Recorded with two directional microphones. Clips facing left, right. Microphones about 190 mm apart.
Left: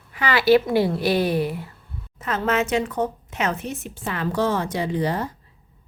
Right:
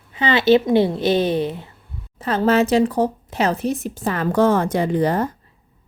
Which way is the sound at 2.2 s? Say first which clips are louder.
Right 6 dB; 35° right (ahead or behind).